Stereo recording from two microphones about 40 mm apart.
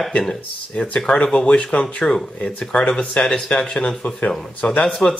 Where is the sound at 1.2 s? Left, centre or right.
Left.